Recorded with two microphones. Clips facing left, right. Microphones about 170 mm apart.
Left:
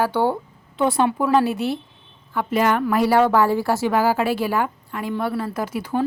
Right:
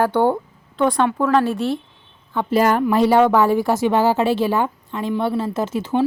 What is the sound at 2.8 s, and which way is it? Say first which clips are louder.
A woman's voice: right 3 dB; 25° right (ahead or behind).